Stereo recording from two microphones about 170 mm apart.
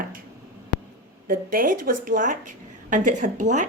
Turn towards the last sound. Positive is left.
turn(degrees=-45)  # may be behind; listen again after turning